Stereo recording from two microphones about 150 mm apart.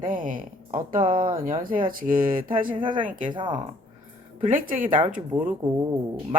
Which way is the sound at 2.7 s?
35° right (ahead or behind).